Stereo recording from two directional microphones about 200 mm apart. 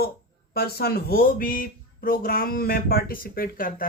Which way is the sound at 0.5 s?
50° left (ahead or behind).